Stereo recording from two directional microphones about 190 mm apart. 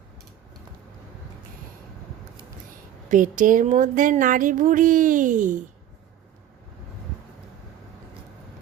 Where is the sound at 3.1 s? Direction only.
45° right (ahead or behind).